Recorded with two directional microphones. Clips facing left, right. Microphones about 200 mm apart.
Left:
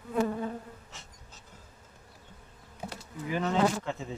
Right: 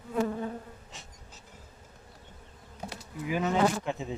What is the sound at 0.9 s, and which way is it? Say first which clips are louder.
Insect: right 2 dB; 15° right (ahead or behind).